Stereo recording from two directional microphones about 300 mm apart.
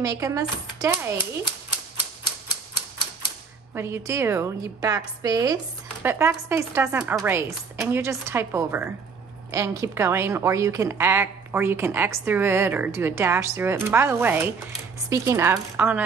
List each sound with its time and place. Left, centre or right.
0.0 s a woman's voice: centre
3.7 s a woman's voice: centre